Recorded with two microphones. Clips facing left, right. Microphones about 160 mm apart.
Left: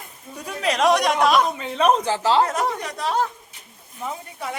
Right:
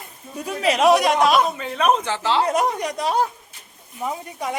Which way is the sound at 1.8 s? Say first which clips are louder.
Left 1 dB; 35° left (ahead or behind).